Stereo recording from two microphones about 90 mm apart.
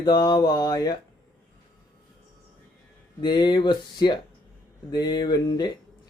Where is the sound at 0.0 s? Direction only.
55° left (ahead or behind).